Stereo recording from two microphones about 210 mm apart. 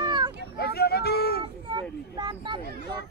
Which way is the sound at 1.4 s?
20° right (ahead or behind).